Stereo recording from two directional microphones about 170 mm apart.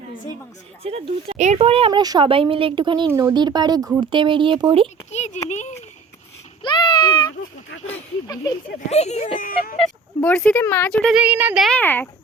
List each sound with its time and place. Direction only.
0.8 s speech: 35° right (ahead or behind)
5.1 s a child's voice: 45° left (ahead or behind)
6.6 s a sound: 30° left (ahead or behind)
8.9 s speech: 40° left (ahead or behind)
9.7 s speech: 5° left (ahead or behind)
11.1 s speech: 10° right (ahead or behind)
11.8 s speech: 10° left (ahead or behind)